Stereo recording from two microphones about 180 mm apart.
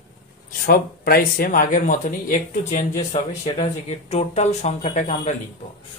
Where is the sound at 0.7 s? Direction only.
55° left (ahead or behind).